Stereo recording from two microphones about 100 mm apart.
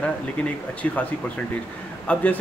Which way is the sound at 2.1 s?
15° left (ahead or behind).